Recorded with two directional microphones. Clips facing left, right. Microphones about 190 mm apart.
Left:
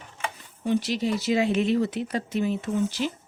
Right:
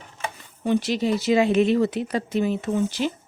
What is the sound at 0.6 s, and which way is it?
Speech, 65° right (ahead or behind).